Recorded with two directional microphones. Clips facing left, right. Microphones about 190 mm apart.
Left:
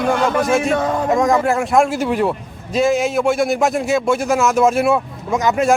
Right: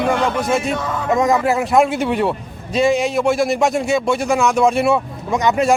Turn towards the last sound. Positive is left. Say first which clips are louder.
# even
turn(degrees=0)  # may be behind; listen again after turning